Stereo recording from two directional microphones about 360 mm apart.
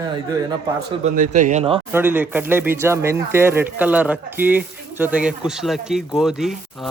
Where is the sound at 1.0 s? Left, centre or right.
Right.